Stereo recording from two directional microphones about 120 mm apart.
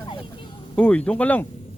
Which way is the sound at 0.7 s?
10° left (ahead or behind).